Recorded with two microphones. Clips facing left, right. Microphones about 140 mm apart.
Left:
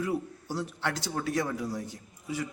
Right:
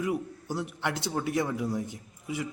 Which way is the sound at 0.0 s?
15° right (ahead or behind).